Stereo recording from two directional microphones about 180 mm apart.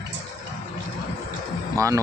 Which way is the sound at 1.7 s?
15° right (ahead or behind).